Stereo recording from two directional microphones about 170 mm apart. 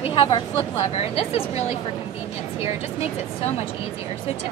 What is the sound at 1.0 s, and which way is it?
Speech, 35° left (ahead or behind).